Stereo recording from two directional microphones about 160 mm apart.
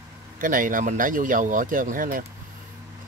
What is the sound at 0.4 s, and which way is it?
Speech, 55° right (ahead or behind).